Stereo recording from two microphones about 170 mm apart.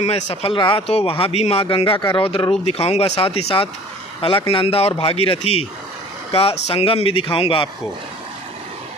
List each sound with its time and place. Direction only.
0.3 s speech: 35° left (ahead or behind)